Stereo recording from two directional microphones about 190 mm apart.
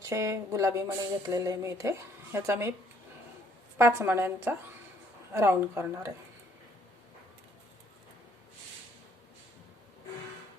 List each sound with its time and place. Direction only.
0.0 s speech: 15° right (ahead or behind)
3.8 s speech: 15° right (ahead or behind)